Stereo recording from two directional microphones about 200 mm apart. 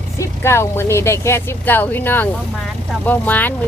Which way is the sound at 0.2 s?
15° left (ahead or behind).